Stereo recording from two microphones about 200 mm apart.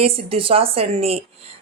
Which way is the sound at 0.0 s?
30° right (ahead or behind).